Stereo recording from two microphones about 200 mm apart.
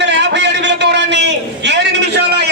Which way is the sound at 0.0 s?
60° right (ahead or behind).